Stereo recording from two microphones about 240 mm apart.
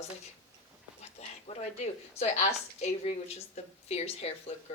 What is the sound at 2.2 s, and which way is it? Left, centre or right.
A woman's voice, left.